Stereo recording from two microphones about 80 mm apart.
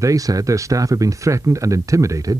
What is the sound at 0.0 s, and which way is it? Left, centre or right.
Speech, right.